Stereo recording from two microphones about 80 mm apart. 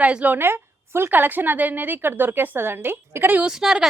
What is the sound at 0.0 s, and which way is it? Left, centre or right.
Speech, centre.